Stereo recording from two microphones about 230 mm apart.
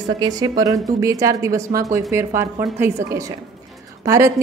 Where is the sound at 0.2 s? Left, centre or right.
Centre.